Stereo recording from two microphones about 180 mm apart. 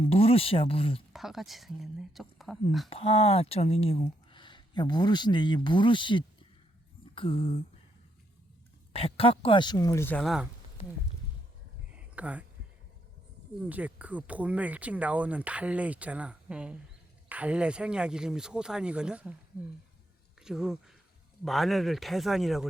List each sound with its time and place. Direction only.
0.0 s speech: 35° left (ahead or behind)
1.1 s speech: centre (ahead or behind)
2.9 s speech: 35° left (ahead or behind)
7.0 s a sound: 30° left (ahead or behind)
8.9 s speech: 30° left (ahead or behind); by 10.2 s 10° left (ahead or behind)
11.9 s a sound: 5° right (ahead or behind)
13.6 s speech: 10° right (ahead or behind)
20.4 s speech: 5° right (ahead or behind)